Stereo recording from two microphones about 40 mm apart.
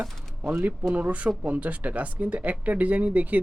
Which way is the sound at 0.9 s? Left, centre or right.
Right.